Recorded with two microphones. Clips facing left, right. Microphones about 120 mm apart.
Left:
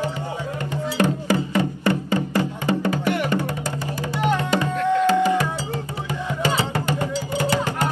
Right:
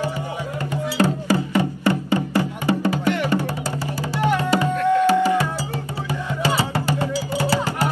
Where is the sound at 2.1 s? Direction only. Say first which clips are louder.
Right 1 dB; 15° right (ahead or behind).